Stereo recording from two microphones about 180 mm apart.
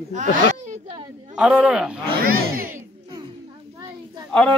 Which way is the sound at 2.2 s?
55° right (ahead or behind).